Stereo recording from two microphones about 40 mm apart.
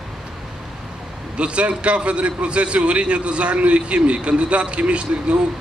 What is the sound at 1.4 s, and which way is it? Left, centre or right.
A man's voice, right.